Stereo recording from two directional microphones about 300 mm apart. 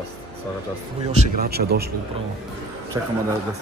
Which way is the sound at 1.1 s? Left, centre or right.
Right.